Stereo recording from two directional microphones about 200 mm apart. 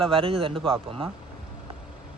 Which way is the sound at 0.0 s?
25° right (ahead or behind).